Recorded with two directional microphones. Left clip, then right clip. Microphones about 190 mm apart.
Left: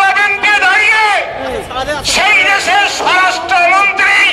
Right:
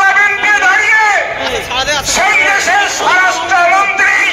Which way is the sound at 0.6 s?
30° left (ahead or behind).